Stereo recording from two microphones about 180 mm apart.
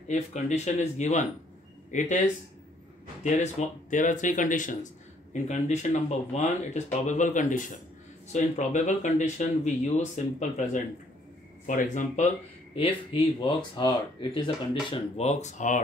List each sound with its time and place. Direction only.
0.1 s speech: 40° left (ahead or behind)
3.3 s speech: 40° left (ahead or behind)
12.7 s speech: 30° left (ahead or behind)